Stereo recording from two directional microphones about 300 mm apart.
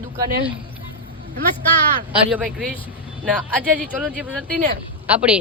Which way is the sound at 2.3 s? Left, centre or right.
Centre.